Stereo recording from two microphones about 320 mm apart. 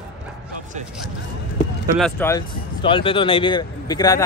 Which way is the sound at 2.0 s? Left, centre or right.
Centre.